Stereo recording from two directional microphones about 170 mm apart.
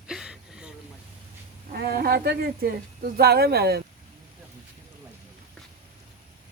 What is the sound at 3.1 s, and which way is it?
Speech, 65° right (ahead or behind).